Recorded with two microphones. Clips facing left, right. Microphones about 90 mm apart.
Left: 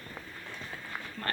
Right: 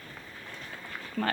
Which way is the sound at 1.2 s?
65° right (ahead or behind).